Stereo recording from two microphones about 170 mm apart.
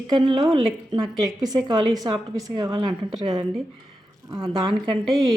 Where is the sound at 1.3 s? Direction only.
20° right (ahead or behind).